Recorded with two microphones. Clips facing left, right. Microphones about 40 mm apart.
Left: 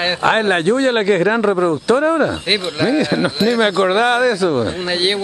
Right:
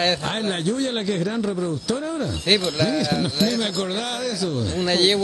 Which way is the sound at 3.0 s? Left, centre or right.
Left.